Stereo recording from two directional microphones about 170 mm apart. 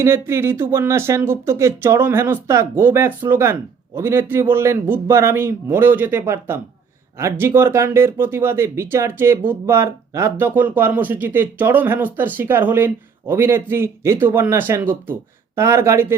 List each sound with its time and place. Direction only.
0.0 s speech: 15° right (ahead or behind)